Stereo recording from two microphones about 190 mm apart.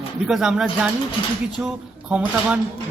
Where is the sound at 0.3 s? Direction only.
Centre (ahead or behind).